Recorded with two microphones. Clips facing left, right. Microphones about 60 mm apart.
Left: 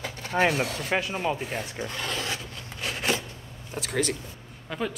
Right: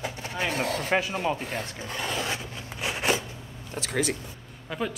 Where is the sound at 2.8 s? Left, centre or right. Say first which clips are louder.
Right 2 dB; centre.